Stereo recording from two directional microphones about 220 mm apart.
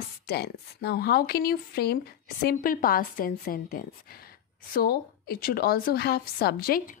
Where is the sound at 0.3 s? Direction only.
45° left (ahead or behind).